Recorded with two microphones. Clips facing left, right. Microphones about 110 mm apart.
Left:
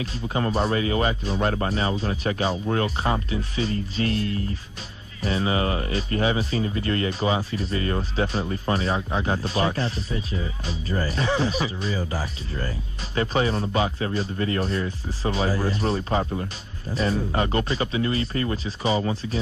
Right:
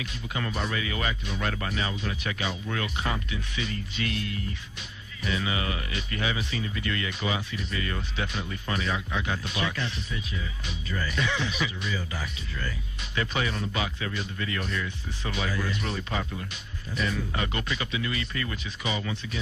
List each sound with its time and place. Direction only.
0.0 s speech: 35° left (ahead or behind)